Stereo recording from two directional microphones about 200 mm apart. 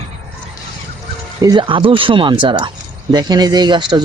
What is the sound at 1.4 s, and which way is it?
Speech, 20° right (ahead or behind).